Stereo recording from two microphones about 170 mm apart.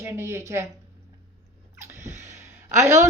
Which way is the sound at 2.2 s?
15° right (ahead or behind).